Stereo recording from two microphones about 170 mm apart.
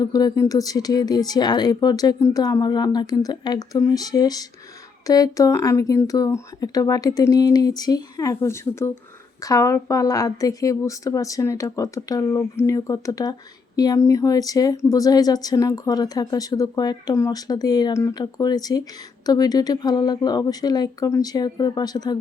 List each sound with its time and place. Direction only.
0.0 s speech: 25° left (ahead or behind)